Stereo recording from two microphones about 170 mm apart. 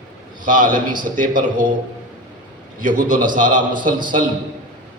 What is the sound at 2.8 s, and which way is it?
A man's voice, 50° right (ahead or behind).